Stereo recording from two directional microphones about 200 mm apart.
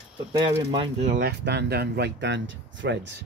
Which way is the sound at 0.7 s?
25° right (ahead or behind).